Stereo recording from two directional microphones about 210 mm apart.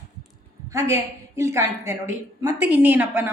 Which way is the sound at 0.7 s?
15° right (ahead or behind).